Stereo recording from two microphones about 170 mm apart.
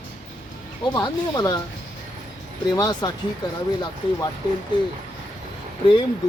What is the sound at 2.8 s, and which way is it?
Speech, 25° left (ahead or behind).